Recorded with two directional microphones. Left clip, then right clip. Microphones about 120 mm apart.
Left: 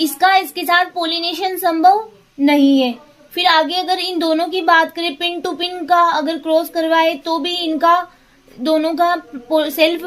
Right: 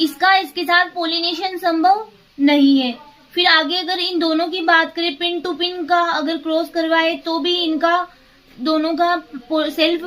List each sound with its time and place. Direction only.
0.2 s a child's voice: 30° left (ahead or behind)